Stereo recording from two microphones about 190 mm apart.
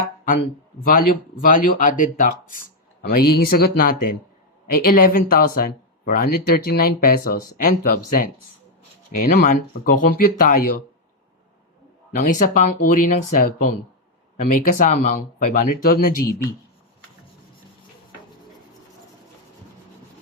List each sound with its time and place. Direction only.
0.9 s speech: 45° left (ahead or behind)
12.1 s speech: 45° left (ahead or behind)